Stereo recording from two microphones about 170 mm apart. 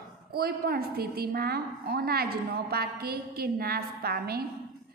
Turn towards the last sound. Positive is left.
turn(degrees=-65)  # may be behind; listen again after turning